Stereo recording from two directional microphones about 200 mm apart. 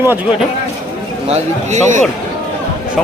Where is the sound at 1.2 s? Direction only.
35° right (ahead or behind).